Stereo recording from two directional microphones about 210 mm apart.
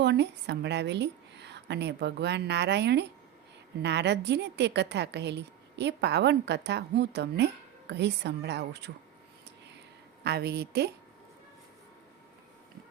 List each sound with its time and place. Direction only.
0.0 s a woman's voice: 55° right (ahead or behind)
10.2 s a woman's voice: 50° right (ahead or behind)